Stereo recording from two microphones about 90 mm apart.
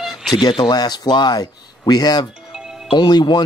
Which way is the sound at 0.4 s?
55° left (ahead or behind).